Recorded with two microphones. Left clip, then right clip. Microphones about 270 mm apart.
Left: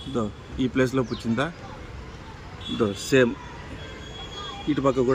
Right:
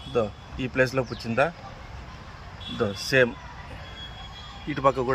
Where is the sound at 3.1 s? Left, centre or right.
Right.